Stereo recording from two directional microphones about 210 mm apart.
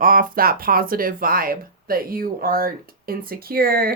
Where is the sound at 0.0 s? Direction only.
40° right (ahead or behind).